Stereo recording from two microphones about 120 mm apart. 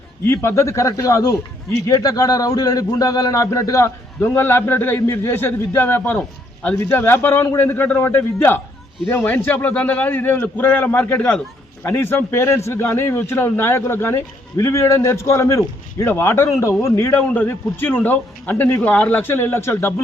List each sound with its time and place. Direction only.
0.3 s a man's voice: 20° left (ahead or behind)